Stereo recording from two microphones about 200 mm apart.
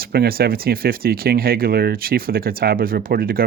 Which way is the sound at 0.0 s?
50° right (ahead or behind).